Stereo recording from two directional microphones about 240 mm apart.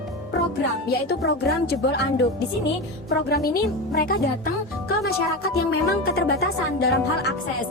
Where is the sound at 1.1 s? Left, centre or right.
Left.